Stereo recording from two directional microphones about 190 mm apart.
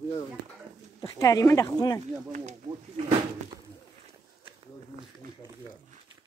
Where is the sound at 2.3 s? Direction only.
35° right (ahead or behind).